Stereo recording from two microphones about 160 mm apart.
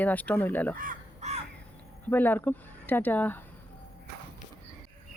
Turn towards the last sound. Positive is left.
turn(degrees=10)  # may be behind; listen again after turning